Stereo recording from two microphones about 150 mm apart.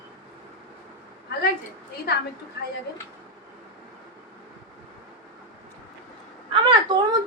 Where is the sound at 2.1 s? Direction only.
90° left.